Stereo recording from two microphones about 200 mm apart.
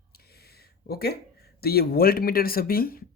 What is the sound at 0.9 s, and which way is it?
Speech, 50° left (ahead or behind).